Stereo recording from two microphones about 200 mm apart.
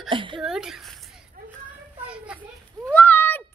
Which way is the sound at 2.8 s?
10° left (ahead or behind).